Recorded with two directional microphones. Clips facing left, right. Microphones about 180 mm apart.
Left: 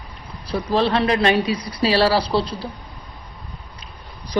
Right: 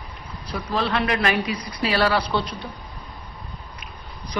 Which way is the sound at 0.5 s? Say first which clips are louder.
Left 5 dB; 30° left (ahead or behind).